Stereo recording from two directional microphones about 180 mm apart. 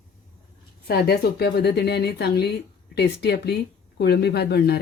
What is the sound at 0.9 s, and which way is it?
Speech, 60° left (ahead or behind).